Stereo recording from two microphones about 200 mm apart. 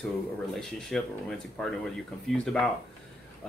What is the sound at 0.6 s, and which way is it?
Speech, centre (ahead or behind).